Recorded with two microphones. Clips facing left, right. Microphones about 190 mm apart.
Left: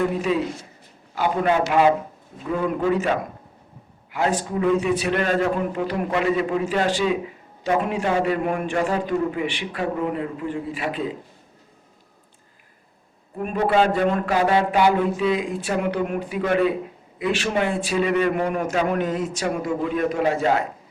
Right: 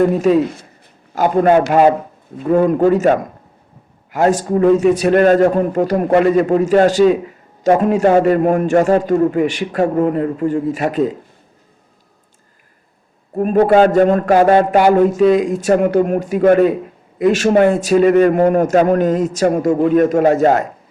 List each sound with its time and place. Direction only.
0.0 s a man's voice: 45° right (ahead or behind)
13.3 s a man's voice: 45° right (ahead or behind)